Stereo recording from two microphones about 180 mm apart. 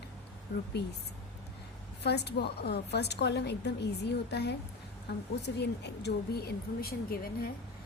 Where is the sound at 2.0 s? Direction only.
65° left (ahead or behind).